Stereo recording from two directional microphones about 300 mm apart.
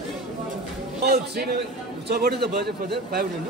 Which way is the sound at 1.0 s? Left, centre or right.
Right.